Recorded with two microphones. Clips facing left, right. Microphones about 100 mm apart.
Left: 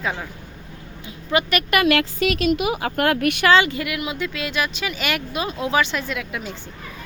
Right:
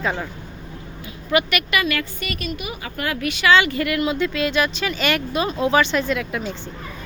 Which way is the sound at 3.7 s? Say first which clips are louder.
Right 5 dB; 10° left (ahead or behind).